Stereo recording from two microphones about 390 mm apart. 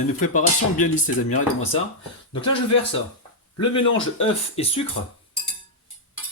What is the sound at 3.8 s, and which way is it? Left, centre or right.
Speech, left.